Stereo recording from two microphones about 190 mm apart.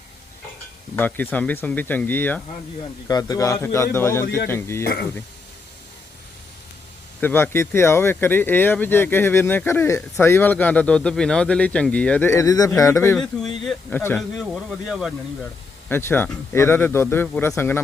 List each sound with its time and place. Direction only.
0.9 s speech: 10° left (ahead or behind)
4.8 s speech: 50° left (ahead or behind)
7.2 s speech: 10° left (ahead or behind)
15.9 s speech: 10° left (ahead or behind)